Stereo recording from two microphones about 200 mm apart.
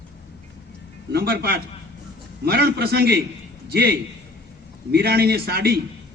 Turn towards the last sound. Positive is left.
turn(degrees=-50)  # may be behind; listen again after turning